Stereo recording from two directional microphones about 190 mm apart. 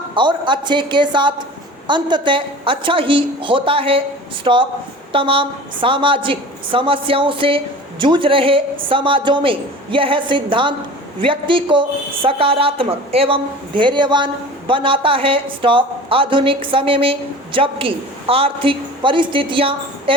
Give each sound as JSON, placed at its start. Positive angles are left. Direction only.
{"t": 0.1, "sound": "a woman's voice", "side_deg": -25}